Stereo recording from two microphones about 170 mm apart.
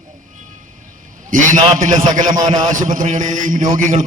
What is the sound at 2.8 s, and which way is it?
A man's voice, 50° right (ahead or behind).